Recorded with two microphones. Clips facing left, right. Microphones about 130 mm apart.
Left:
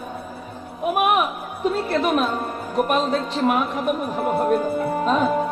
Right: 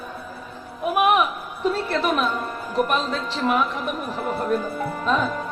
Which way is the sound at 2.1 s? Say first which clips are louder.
Left 2 dB; 45° left (ahead or behind).